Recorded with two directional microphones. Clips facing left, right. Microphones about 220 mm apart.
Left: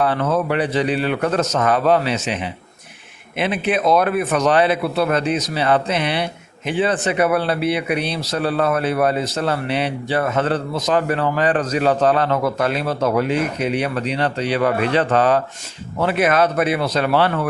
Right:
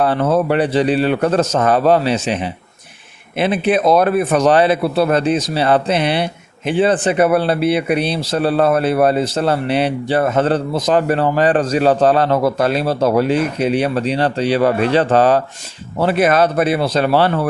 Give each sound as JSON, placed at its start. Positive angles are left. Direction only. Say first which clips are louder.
{"t": 0.0, "sound": "speech", "louder": "right 4 dB", "side_deg": -30}